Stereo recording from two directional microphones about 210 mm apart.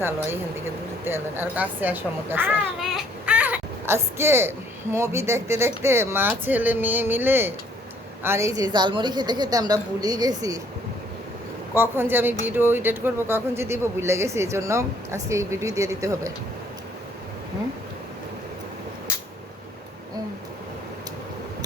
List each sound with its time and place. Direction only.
1.0 s a child's voice: 10° right (ahead or behind)
11.7 s a child's voice: 10° right (ahead or behind)